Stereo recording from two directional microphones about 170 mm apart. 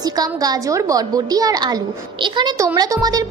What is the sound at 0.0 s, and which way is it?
A woman's voice, 20° right (ahead or behind).